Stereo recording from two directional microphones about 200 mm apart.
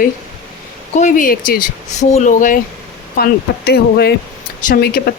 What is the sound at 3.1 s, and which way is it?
Speech, 50° left (ahead or behind).